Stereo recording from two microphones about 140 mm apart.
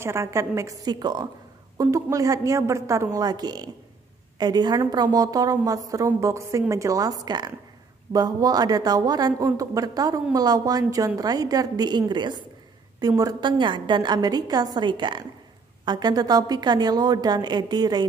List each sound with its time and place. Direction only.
0.0 s a woman's voice: 20° right (ahead or behind)